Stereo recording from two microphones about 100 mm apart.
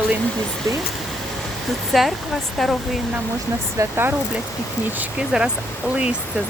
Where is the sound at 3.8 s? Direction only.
25° right (ahead or behind).